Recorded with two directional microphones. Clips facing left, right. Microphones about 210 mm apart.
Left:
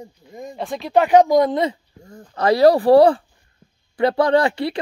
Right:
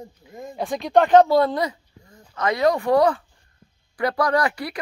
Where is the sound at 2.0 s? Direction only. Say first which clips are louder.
Left 4 dB; 40° left (ahead or behind).